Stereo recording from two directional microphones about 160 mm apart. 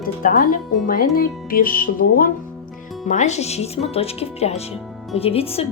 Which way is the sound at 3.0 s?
50° left (ahead or behind).